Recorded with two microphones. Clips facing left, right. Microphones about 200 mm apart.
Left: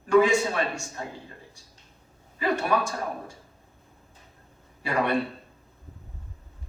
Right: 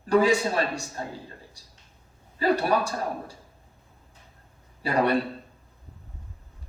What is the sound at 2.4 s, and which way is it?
Speech, 35° right (ahead or behind).